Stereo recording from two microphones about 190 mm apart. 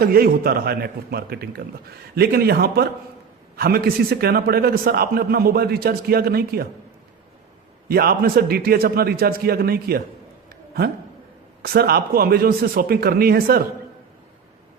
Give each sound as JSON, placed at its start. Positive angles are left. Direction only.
{"t": 0.0, "sound": "a man's voice", "side_deg": -50}
{"t": 7.9, "sound": "a man's voice", "side_deg": -50}
{"t": 10.5, "sound": "a sound", "side_deg": -55}
{"t": 11.6, "sound": "a man's voice", "side_deg": -55}